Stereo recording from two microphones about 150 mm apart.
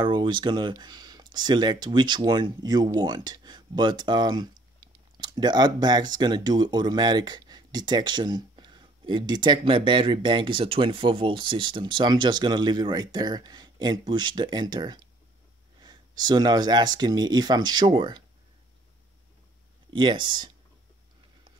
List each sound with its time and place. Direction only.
0.0 s speech: 30° right (ahead or behind)
19.9 s speech: 30° right (ahead or behind)